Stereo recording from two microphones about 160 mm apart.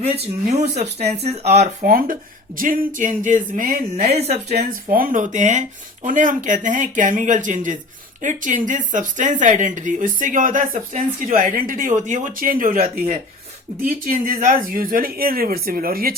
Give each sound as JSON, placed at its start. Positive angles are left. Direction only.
{"t": 0.0, "sound": "a woman's voice", "side_deg": -40}
{"t": 4.0, "sound": "speech", "side_deg": -40}
{"t": 4.4, "sound": "a woman's voice", "side_deg": -75}